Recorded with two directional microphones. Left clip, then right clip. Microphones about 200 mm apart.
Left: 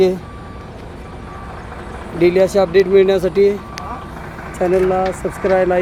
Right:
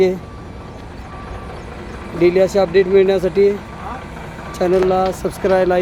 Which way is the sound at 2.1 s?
Centre (ahead or behind).